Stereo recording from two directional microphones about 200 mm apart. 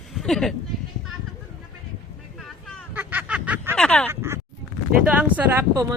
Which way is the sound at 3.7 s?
5° left (ahead or behind).